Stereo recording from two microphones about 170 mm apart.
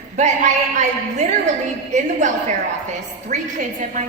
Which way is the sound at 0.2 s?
45° right (ahead or behind).